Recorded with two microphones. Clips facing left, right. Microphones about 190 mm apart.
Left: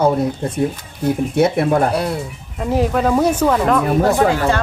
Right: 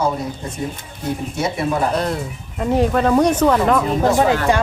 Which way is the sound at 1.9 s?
10° left (ahead or behind).